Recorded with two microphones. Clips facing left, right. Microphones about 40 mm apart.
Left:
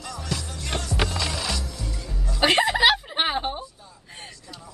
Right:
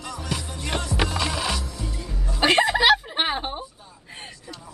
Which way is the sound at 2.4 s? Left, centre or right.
Centre.